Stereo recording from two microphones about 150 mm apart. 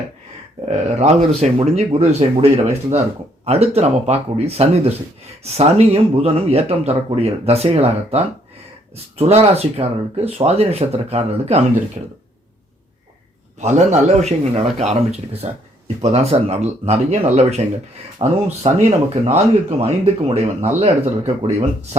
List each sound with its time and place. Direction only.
0.9 s speech: 45° right (ahead or behind)
13.6 s speech: 50° right (ahead or behind)